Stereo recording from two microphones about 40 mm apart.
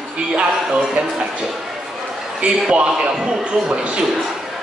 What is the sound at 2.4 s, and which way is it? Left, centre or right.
Speech, right.